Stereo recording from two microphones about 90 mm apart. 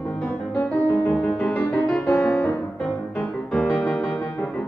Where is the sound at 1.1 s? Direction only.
15° left (ahead or behind).